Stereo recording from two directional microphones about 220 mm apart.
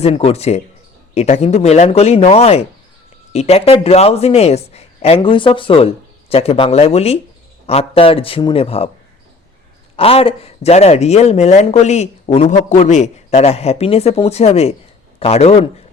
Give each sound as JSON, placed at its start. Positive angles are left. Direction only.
{"t": 0.0, "sound": "speech", "side_deg": 30}
{"t": 9.9, "sound": "speech", "side_deg": 25}